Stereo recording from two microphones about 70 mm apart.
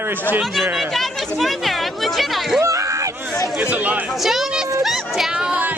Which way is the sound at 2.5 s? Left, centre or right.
Right.